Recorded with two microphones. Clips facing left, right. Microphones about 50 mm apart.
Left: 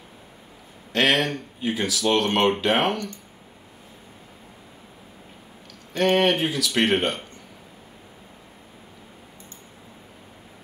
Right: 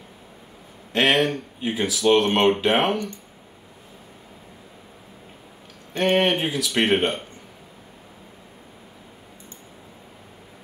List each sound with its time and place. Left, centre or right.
1.0 s speech: centre
1.6 s speech: centre
5.9 s speech: centre